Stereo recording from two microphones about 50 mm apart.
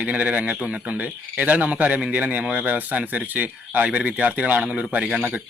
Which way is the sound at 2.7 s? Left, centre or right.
Right.